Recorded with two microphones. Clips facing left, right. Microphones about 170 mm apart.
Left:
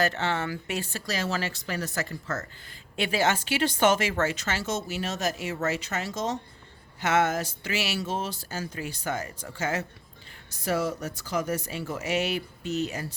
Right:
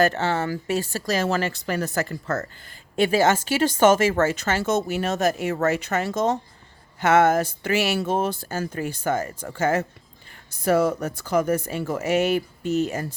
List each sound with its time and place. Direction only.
0.0 s speech: 45° right (ahead or behind)